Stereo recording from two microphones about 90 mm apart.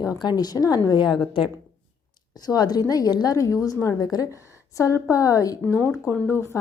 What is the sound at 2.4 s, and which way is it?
A woman's voice, 50° left (ahead or behind).